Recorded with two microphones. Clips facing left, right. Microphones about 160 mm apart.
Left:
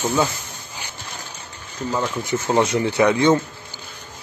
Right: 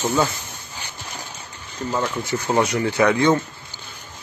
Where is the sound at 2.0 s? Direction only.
15° left (ahead or behind).